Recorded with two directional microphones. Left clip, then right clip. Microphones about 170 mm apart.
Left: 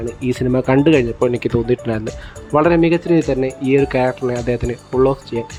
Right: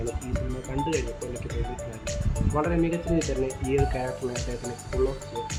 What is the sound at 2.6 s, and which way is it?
Speech, 55° left (ahead or behind).